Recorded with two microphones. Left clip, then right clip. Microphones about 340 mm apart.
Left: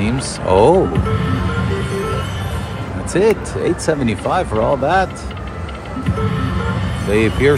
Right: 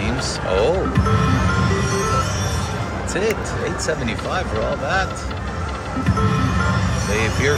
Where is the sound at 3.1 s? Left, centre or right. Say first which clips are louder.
Left 7 dB; centre.